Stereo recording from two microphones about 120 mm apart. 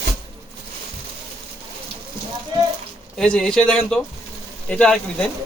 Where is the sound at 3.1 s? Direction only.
5° left (ahead or behind).